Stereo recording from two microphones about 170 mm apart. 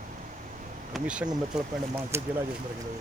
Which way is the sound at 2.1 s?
15° right (ahead or behind).